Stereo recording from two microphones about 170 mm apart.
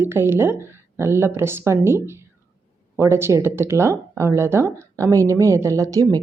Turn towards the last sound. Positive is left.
turn(degrees=-20)  # may be behind; listen again after turning